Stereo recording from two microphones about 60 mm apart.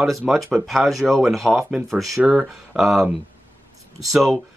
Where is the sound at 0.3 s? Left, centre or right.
Centre.